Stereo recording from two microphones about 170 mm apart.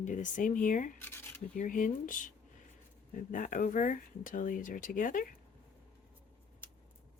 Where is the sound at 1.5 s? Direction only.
50° left (ahead or behind).